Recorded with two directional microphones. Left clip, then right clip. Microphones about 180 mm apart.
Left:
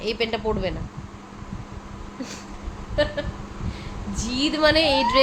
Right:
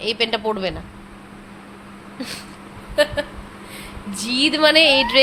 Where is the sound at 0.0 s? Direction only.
Centre (ahead or behind).